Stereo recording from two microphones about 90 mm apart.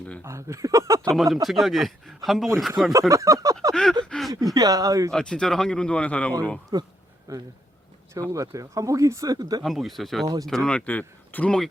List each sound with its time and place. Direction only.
0.2 s speech: 35° right (ahead or behind)
1.1 s speech: centre (ahead or behind)
3.1 s a sound: 35° right (ahead or behind)
3.7 s a sound: 5° left (ahead or behind)
4.5 s speech: 45° right (ahead or behind)
5.1 s speech: 5° left (ahead or behind)
6.7 s speech: 50° right (ahead or behind)
9.6 s speech: centre (ahead or behind); by 11.5 s 15° left (ahead or behind)